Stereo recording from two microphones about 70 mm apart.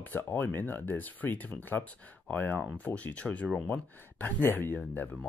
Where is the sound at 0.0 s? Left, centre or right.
Left.